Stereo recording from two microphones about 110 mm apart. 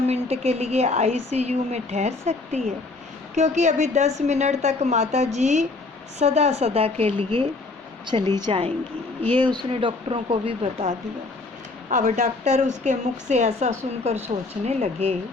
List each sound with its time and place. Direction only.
0.1 s a woman's voice: 70° right (ahead or behind)
3.3 s a woman's voice: 90° right; by 8.6 s 60° right (ahead or behind)
9.4 s speech: 45° right (ahead or behind); by 10.9 s 65° right (ahead or behind)
12.0 s a woman's voice: 90° right; by 15.1 s 70° right (ahead or behind)